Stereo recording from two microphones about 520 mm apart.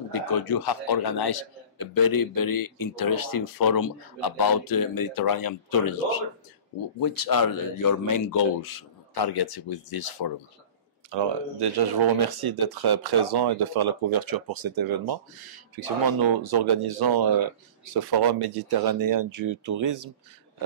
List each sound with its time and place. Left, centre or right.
0.1 s a man's voice: left
7.0 s a man's voice: left
11.1 s speech: right